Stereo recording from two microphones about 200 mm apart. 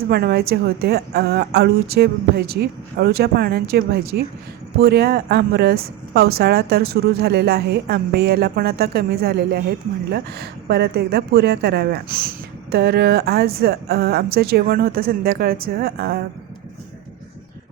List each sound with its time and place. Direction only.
0.1 s speech: 50° right (ahead or behind)